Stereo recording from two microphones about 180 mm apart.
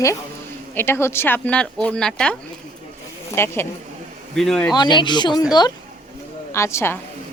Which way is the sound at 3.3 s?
15° left (ahead or behind).